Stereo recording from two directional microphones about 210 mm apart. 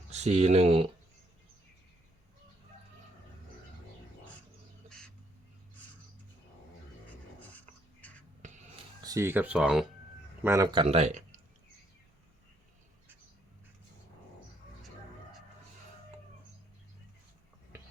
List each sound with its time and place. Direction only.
0.1 s speech: 30° right (ahead or behind)
4.9 s bird: 5° left (ahead or behind)
7.3 s a sound: 10° left (ahead or behind)
8.4 s a sound: 35° right (ahead or behind)
9.0 s speech: 15° right (ahead or behind)
10.4 s speech: 15° right (ahead or behind); by 11.3 s 35° right (ahead or behind)